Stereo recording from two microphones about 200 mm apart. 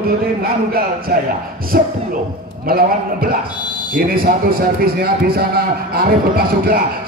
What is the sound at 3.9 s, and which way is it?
Speech, 45° right (ahead or behind).